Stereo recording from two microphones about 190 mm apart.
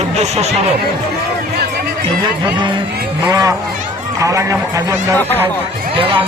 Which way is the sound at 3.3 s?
20° right (ahead or behind).